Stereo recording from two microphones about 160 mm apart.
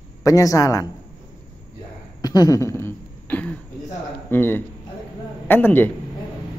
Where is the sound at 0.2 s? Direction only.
20° left (ahead or behind).